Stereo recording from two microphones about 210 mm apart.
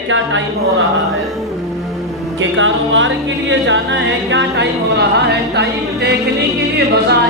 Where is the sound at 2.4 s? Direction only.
65° right (ahead or behind).